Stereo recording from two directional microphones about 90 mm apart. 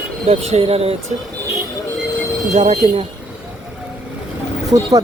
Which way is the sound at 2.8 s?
90° right.